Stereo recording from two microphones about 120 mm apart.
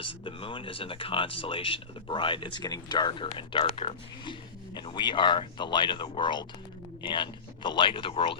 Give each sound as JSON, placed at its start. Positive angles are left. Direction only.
{"t": 0.0, "sound": "speech", "side_deg": 45}